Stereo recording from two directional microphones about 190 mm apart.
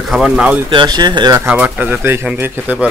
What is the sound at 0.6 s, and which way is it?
Speech, 25° right (ahead or behind).